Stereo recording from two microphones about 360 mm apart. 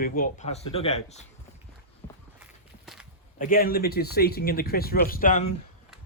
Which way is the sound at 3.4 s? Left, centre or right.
Left.